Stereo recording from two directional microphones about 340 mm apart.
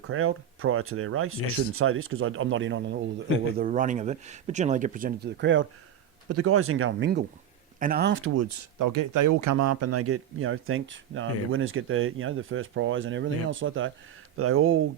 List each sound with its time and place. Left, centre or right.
0.1 s speech: right
3.2 s speech: left
3.6 s speech: right